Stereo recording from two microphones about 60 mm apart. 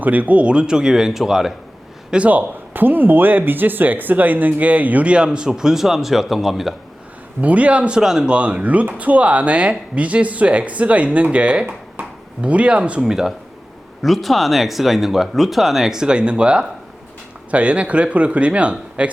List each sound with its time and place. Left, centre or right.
0.0 s speech: right; by 1.5 s centre
2.0 s speech: right; by 6.7 s centre
7.4 s speech: right; by 8.4 s centre
8.4 s speech: right